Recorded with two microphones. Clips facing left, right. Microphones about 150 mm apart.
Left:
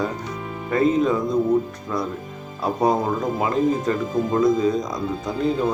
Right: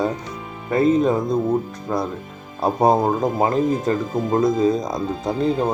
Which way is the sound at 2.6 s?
40° right (ahead or behind).